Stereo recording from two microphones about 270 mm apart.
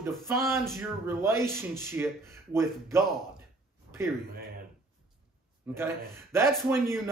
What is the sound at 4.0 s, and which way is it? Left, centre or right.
Speech, centre.